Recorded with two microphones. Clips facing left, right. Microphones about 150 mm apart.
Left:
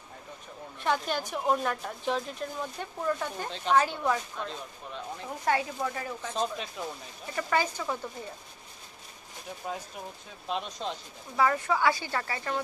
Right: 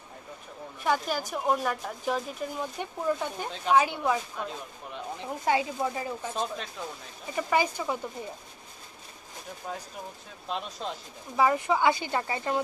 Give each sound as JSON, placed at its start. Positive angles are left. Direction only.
{"t": 0.8, "sound": "speech", "side_deg": -5}
{"t": 6.3, "sound": "speech", "side_deg": 0}
{"t": 7.3, "sound": "speech", "side_deg": -15}
{"t": 9.6, "sound": "speech", "side_deg": 5}
{"t": 11.3, "sound": "speech", "side_deg": -15}